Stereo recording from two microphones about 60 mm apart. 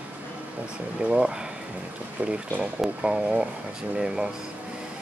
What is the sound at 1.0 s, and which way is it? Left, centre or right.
Speech, centre.